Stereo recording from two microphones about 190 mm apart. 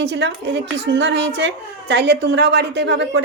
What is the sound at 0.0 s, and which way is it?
A child's voice, 65° right (ahead or behind).